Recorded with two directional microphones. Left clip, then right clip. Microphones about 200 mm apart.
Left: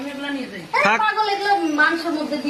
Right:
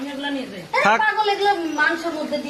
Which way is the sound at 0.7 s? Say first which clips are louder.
Even; centre (ahead or behind).